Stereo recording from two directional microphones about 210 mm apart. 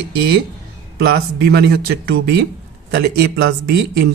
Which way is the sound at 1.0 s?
50° right (ahead or behind).